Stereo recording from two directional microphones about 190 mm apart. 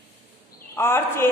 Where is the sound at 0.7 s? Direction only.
10° left (ahead or behind).